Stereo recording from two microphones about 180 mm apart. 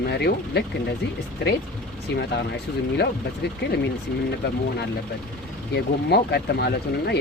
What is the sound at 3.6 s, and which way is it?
Speech, 70° left (ahead or behind).